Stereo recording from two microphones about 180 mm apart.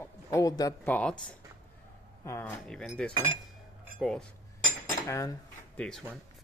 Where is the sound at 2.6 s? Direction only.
5° left (ahead or behind).